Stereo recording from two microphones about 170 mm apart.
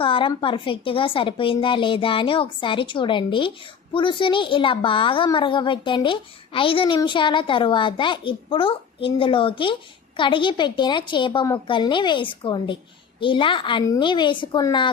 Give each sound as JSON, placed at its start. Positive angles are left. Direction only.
{"t": 0.0, "sound": "a woman's voice", "side_deg": 30}